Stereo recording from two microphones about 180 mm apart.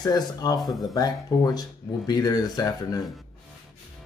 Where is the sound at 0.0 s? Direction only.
20° left (ahead or behind).